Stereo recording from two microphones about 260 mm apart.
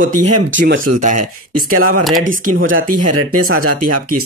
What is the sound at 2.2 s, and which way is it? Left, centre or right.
Speech, right.